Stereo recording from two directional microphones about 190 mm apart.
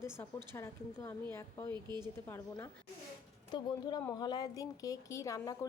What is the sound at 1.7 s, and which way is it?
Speech, 20° right (ahead or behind).